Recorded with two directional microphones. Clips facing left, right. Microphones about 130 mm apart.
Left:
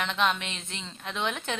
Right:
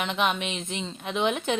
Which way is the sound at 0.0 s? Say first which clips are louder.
Right 2 dB; 15° right (ahead or behind).